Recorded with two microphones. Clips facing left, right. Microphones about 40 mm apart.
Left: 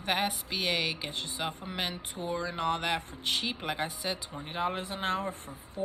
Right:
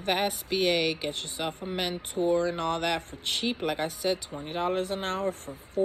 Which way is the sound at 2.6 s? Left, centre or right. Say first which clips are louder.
Right 2 dB; centre.